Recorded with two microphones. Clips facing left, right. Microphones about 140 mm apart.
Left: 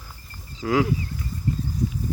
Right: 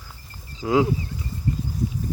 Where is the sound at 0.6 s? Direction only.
20° right (ahead or behind).